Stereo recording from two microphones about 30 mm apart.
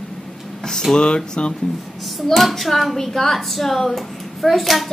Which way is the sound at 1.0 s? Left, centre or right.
Left.